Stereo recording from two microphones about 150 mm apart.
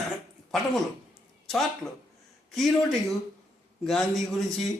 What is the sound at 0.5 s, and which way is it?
Speech, centre (ahead or behind).